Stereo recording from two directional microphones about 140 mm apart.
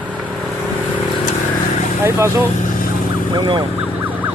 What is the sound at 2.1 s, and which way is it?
Speech, 20° right (ahead or behind).